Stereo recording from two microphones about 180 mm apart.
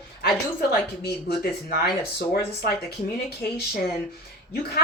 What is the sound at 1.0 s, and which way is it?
Speech, 60° left (ahead or behind).